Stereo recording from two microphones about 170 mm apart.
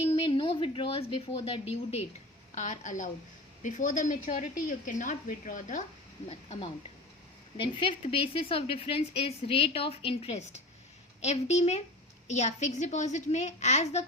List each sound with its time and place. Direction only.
0.2 s a woman's voice: 30° left (ahead or behind); by 5.8 s 50° left (ahead or behind)
6.2 s a woman's voice: 30° left (ahead or behind)